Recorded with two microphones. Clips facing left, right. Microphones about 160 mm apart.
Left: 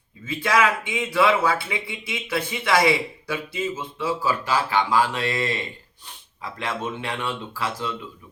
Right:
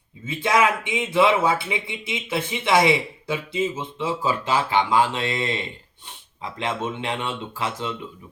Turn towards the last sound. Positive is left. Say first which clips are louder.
# right 1 dB
turn(degrees=-20)  # may be behind; listen again after turning